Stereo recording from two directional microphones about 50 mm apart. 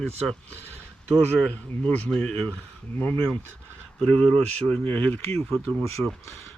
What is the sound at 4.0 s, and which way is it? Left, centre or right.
Speech, centre.